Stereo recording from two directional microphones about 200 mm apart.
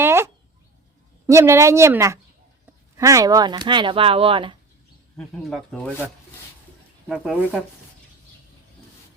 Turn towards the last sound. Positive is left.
turn(degrees=0)  # may be behind; listen again after turning